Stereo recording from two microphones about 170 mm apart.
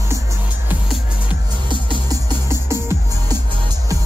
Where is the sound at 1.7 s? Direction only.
30° right (ahead or behind).